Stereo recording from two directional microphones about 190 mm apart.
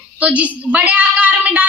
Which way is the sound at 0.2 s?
10° right (ahead or behind).